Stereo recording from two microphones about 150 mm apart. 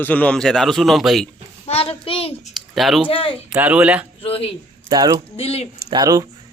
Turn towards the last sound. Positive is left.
turn(degrees=-25)  # may be behind; listen again after turning